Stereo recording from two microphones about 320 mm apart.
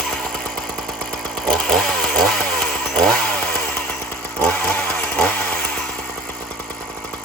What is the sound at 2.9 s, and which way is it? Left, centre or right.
Chainsaw, centre.